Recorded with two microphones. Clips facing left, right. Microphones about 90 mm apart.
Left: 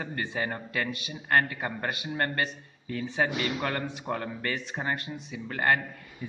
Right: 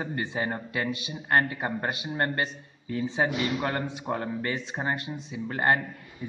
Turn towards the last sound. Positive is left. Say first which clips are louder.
# right 1 dB
turn(degrees=-25)  # may be behind; listen again after turning